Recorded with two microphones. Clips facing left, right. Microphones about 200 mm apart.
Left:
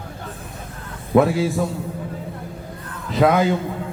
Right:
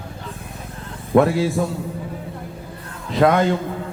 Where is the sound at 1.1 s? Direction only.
Centre (ahead or behind).